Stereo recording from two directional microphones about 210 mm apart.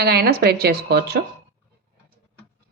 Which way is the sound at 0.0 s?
50° right (ahead or behind).